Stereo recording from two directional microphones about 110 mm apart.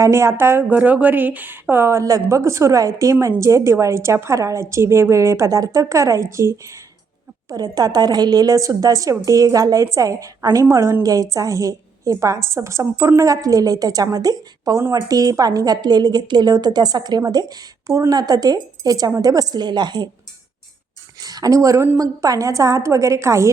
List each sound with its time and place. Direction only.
0.0 s a woman's voice: 25° right (ahead or behind); by 20.1 s 40° right (ahead or behind)
21.2 s a woman's voice: 35° right (ahead or behind)